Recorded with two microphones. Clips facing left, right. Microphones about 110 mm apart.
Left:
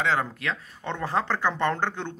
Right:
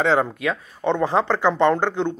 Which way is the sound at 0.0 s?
25° right (ahead or behind).